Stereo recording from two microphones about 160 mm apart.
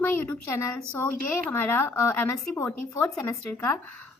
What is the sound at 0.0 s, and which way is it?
A woman's voice, 15° left (ahead or behind).